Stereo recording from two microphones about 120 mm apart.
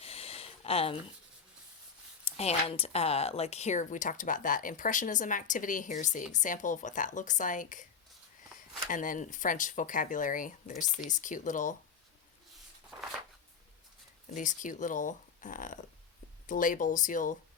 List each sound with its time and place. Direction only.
0.0 s a sound: 55° left (ahead or behind)
2.2 s speech: 60° left (ahead or behind); by 7.9 s 90° left
8.9 s speech: 90° left
14.3 s speech: 90° left